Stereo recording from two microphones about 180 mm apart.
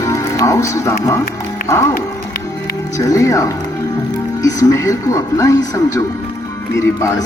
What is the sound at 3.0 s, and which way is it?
Speech, 20° left (ahead or behind).